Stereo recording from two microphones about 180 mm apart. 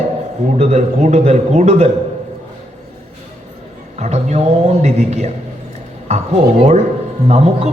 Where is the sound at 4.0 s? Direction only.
40° right (ahead or behind).